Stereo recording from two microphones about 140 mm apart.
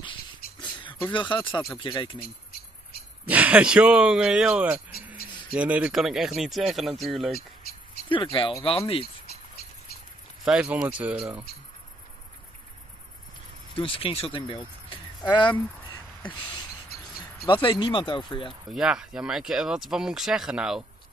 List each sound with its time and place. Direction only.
0.6 s a sound: 35° left (ahead or behind)
1.8 s speech: 35° left (ahead or behind)
3.3 s speech: 10° right (ahead or behind)
8.1 s speech: 35° left (ahead or behind)
10.4 s speech: 5° right (ahead or behind)
13.7 s speech: 40° left (ahead or behind)
17.5 s speech: 35° left (ahead or behind)
18.7 s speech: 5° right (ahead or behind)